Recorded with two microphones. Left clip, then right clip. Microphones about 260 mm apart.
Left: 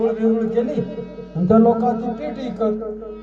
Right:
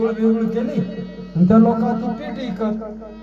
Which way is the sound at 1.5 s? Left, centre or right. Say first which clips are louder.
Left 2 dB; right.